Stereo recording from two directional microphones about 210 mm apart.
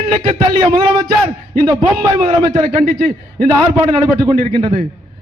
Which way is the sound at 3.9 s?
20° right (ahead or behind).